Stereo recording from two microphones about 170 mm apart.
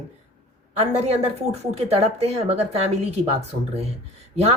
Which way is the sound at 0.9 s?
40° right (ahead or behind).